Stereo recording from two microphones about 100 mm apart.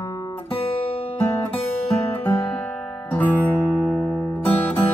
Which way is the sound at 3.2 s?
20° left (ahead or behind).